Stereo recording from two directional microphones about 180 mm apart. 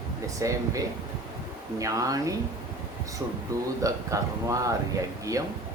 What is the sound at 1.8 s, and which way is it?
Speech, 20° right (ahead or behind).